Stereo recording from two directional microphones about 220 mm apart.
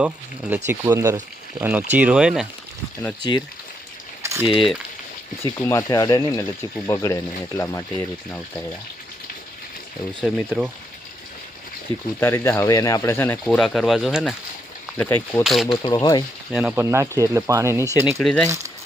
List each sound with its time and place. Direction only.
0.0 s speech: 5° right (ahead or behind)
4.2 s boiling: 15° right (ahead or behind)
5.4 s speech: 15° left (ahead or behind)
10.2 s speech: 5° right (ahead or behind)
11.9 s speech: 25° right (ahead or behind)
12.2 s speech: 10° left (ahead or behind)
15.8 s speech: 15° left (ahead or behind)
16.5 s speech: 5° right (ahead or behind)
18.2 s speech: 5° left (ahead or behind)